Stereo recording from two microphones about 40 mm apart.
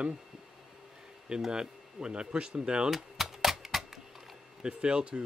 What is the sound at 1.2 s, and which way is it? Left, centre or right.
Speech, centre.